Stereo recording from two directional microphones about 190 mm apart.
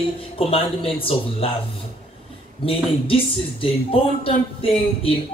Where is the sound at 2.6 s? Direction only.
30° left (ahead or behind).